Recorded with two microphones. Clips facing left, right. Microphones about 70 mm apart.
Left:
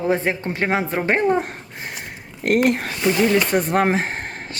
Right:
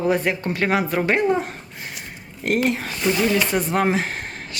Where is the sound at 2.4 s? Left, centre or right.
Left.